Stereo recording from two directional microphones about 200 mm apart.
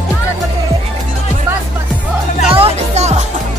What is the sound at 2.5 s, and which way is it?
Music, 30° right (ahead or behind).